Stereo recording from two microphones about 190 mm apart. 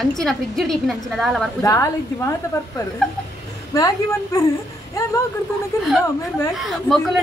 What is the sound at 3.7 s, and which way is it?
Speech, 20° left (ahead or behind).